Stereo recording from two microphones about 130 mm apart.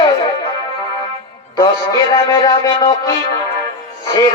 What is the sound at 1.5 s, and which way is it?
Music, 30° left (ahead or behind).